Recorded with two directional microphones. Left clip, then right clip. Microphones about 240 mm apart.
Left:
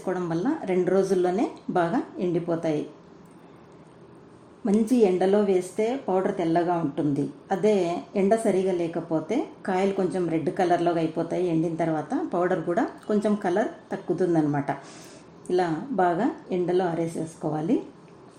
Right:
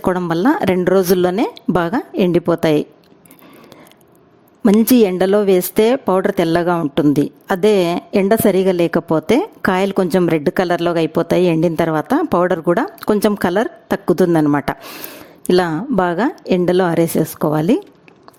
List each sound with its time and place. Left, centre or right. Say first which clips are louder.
0.0 s a woman's voice: right 11 dB; right
4.6 s a woman's voice: right 9 dB; right